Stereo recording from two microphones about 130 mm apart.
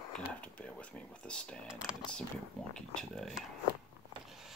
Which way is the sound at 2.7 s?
5° left (ahead or behind).